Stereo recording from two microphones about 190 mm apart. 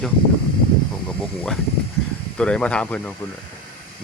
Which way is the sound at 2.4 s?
5° left (ahead or behind).